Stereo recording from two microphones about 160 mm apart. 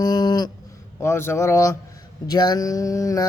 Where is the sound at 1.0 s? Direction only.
15° left (ahead or behind).